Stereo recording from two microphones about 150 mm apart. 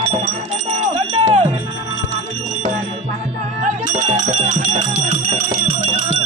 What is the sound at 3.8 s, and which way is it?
Music, 45° right (ahead or behind).